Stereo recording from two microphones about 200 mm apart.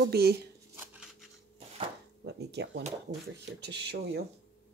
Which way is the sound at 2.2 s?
60° right (ahead or behind).